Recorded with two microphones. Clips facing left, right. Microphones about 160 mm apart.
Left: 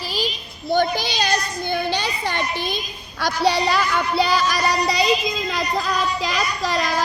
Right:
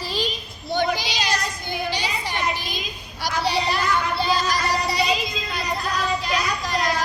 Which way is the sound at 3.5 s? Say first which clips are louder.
Left 4 dB; 80° left.